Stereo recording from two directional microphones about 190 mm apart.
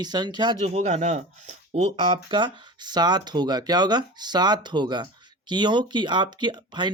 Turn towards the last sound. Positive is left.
turn(degrees=-25)  # may be behind; listen again after turning